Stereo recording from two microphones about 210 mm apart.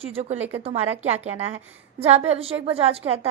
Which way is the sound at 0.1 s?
30° right (ahead or behind).